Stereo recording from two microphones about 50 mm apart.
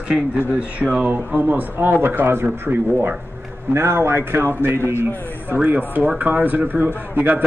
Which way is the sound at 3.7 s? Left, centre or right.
Right.